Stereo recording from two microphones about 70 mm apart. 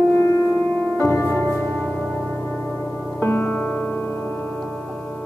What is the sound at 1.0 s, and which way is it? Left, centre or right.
Music, left.